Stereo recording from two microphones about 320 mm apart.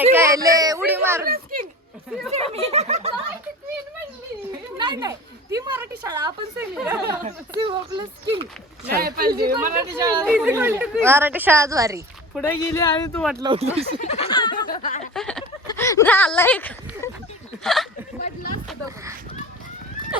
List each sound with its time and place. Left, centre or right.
0.0 s a sound: centre
1.3 s a sound: right
2.3 s speech: centre
4.8 s speech: centre
9.0 s speech: right
9.9 s speech: centre
12.4 s speech: centre
13.4 s speech: centre
14.0 s speech: centre
15.1 s speech: centre